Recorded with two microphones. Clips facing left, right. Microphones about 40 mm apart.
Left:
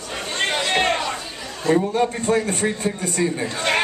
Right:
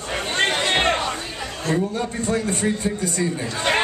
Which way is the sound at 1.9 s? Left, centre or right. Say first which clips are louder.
Left 4 dB; left.